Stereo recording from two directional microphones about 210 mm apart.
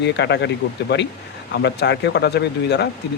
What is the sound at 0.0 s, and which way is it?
Speech, 55° left (ahead or behind).